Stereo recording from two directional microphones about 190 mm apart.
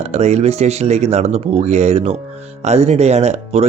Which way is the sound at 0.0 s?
35° right (ahead or behind).